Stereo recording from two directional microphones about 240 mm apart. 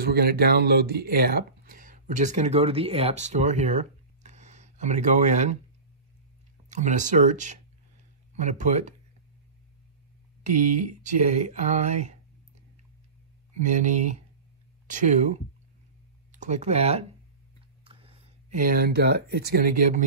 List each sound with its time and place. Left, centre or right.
0.0 s speech: right
6.7 s speech: right
10.4 s speech: right
13.5 s speech: right